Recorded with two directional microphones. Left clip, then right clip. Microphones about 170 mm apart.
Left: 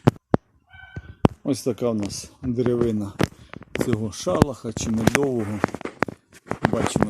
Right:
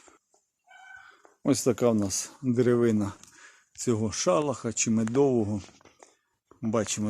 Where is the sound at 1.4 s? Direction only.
5° right (ahead or behind).